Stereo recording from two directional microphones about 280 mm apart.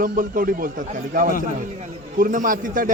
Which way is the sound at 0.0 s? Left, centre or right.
Right.